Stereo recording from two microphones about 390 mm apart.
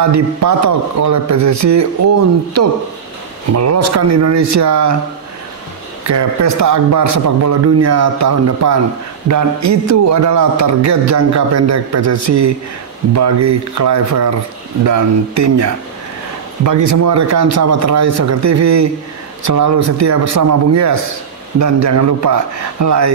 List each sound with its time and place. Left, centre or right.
0.0 s a man's voice: right
6.0 s a man's voice: right
16.6 s a man's voice: right